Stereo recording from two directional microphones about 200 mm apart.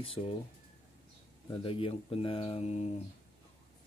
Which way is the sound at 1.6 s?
25° left (ahead or behind).